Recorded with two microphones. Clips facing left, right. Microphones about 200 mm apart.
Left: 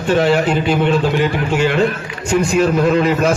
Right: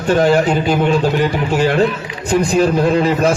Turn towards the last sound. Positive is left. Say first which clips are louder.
# even
turn(degrees=-30)  # may be behind; listen again after turning